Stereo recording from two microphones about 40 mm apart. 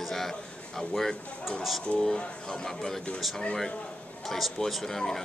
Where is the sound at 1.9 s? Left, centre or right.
Left.